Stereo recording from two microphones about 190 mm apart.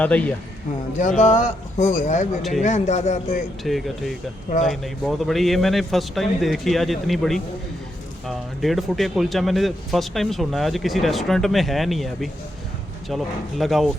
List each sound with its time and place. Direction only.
0.0 s a man's voice: 5° left (ahead or behind)
0.9 s a man's voice: 40° left (ahead or behind)
3.6 s speech: centre (ahead or behind)